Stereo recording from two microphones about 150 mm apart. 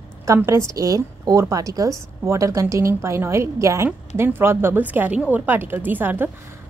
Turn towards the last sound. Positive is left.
turn(degrees=-15)  # may be behind; listen again after turning